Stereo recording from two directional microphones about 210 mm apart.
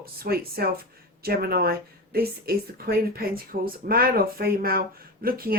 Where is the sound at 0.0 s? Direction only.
45° right (ahead or behind).